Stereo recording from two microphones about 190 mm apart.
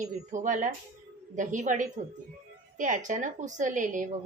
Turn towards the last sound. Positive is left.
turn(degrees=-40)  # may be behind; listen again after turning